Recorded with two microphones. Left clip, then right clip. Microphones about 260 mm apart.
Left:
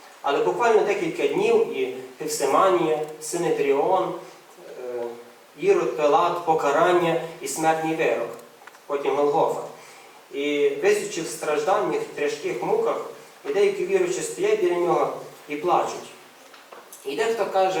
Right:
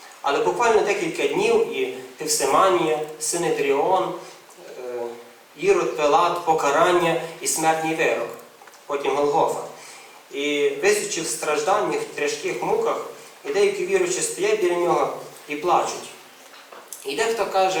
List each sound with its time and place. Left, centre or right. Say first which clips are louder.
0.3 s speech: right 1 dB; centre
4.9 s a sound: right 1 dB; centre
5.6 s speech: right 1 dB; centre
17.1 s speech: right 1 dB; centre